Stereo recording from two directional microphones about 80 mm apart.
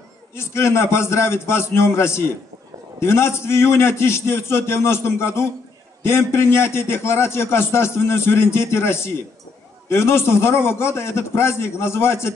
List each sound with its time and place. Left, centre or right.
0.3 s a man's voice: left